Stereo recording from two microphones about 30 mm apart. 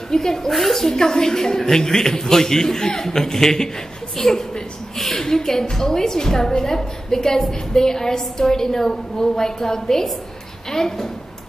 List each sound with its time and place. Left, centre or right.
0.1 s a woman's voice: centre
4.9 s a sound: centre
5.2 s a woman's voice: centre